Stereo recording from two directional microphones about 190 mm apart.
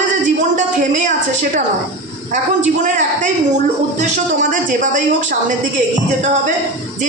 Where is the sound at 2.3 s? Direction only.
40° right (ahead or behind).